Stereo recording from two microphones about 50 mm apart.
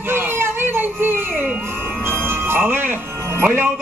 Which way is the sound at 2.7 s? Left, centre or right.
Right.